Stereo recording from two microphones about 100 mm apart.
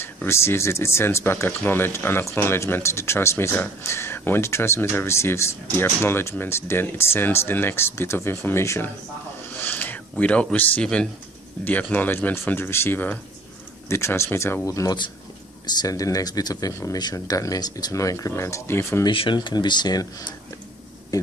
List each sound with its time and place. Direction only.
0.0 s speech: 25° left (ahead or behind)
19.0 s speech: 50° left (ahead or behind); by 21.3 s 35° left (ahead or behind)